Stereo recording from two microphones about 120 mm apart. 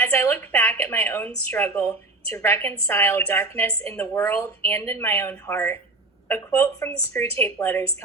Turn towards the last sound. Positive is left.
turn(degrees=15)  # may be behind; listen again after turning